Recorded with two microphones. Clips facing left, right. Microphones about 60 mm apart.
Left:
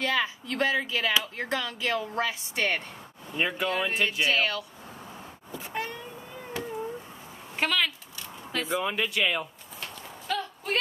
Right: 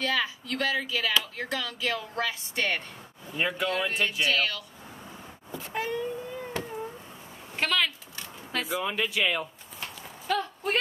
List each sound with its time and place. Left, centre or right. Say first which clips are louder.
0.0 s speech: left 1 dB; left
3.3 s speech: even; centre
3.6 s speech: left 1 dB; left
5.7 s a sound: right 5 dB; centre
7.5 s speech: even; centre
10.2 s clip-clop: right 3 dB; centre